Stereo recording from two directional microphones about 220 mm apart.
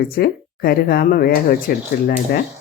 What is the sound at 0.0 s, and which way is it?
Speech, 45° left (ahead or behind).